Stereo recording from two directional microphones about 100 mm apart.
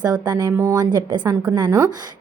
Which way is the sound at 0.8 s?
50° right (ahead or behind).